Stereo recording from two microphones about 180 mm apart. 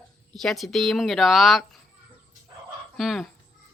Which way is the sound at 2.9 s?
Centre (ahead or behind).